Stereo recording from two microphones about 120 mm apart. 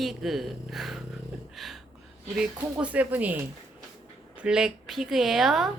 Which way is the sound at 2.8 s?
10° right (ahead or behind).